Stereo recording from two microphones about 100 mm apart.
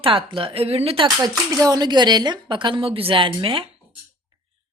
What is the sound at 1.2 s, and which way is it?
Speech, 35° right (ahead or behind).